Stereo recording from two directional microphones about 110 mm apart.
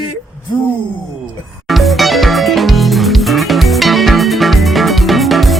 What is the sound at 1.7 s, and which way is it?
Music, centre (ahead or behind).